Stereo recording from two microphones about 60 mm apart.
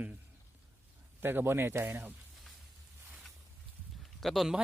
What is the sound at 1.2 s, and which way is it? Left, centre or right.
Speech, right.